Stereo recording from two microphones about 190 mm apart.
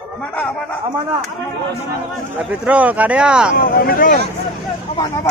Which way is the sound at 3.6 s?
50° left (ahead or behind).